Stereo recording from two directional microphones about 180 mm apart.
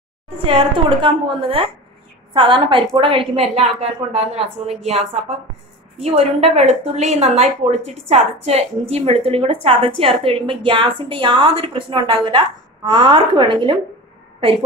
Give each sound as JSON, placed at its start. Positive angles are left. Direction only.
{"t": 0.4, "sound": "a woman's voice", "side_deg": -30}